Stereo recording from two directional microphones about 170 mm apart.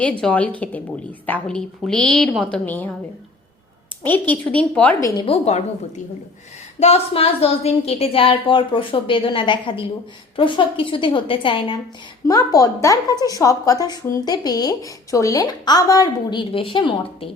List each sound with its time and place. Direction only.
0.0 s a woman's voice: 5° left (ahead or behind)
4.0 s a woman's voice: 10° left (ahead or behind)
5.0 s a woman's voice: 20° left (ahead or behind)
5.3 s a woman's voice: 40° left (ahead or behind)
6.7 s a woman's voice: 40° left (ahead or behind)